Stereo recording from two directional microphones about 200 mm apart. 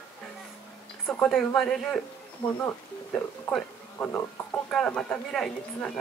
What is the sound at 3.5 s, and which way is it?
Speech, 10° left (ahead or behind).